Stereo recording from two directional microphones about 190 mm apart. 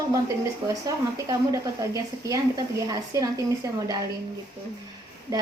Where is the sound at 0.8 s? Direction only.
20° right (ahead or behind).